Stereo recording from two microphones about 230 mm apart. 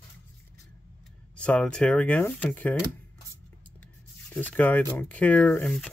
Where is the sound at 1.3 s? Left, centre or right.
Centre.